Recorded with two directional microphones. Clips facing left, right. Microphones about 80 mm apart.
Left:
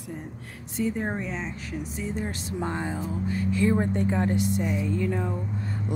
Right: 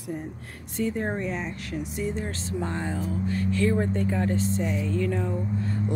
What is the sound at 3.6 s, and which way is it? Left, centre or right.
Speech, left.